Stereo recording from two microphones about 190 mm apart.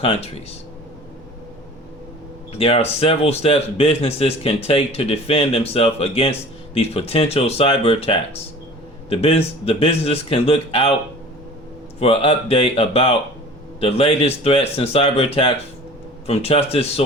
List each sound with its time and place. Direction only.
0.0 s a man's voice: 30° left (ahead or behind)
2.5 s a man's voice: 30° left (ahead or behind)
11.9 s a man's voice: 30° left (ahead or behind)